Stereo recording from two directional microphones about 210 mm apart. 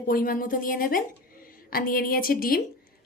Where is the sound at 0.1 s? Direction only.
45° left (ahead or behind).